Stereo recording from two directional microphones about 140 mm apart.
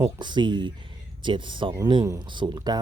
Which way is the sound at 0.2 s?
35° right (ahead or behind).